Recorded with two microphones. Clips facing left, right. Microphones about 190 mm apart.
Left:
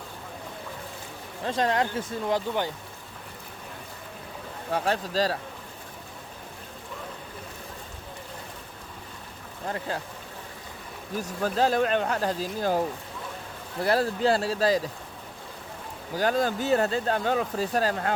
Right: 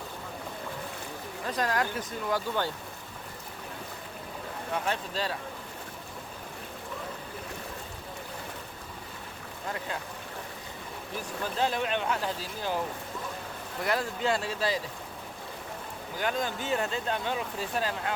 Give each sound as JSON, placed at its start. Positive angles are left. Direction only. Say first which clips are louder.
{"t": 1.5, "sound": "speech", "louder": "left 4 dB", "side_deg": 25}
{"t": 4.7, "sound": "speech", "louder": "left 6 dB", "side_deg": 35}
{"t": 9.6, "sound": "speech", "louder": "left 4 dB", "side_deg": 30}
{"t": 11.4, "sound": "speech", "louder": "left 6 dB", "side_deg": 40}
{"t": 13.8, "sound": "speech", "louder": "left 6 dB", "side_deg": 35}
{"t": 16.1, "sound": "speech", "louder": "left 6 dB", "side_deg": 35}